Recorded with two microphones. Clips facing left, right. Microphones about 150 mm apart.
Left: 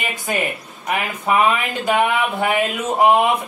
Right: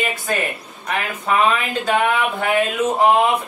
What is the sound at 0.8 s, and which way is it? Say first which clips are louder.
Speech: left 1 dB; 15° left (ahead or behind).